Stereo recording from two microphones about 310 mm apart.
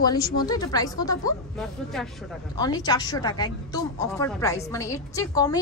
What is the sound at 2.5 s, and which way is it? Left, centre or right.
A woman's voice, centre.